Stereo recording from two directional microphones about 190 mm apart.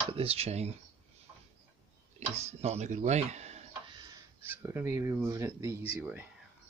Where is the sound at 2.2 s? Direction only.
35° right (ahead or behind).